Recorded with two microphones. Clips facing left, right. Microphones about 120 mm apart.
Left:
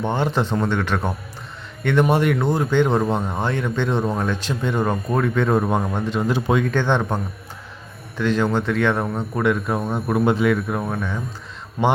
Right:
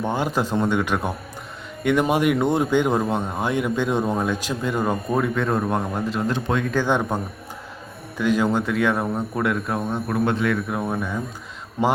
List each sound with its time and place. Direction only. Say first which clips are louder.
0.0 s speech: left 1 dB; 10° right (ahead or behind)
8.2 s speech: even; 10° right (ahead or behind)
9.8 s speech: left 4 dB; 10° left (ahead or behind); by 11.2 s 5° right (ahead or behind)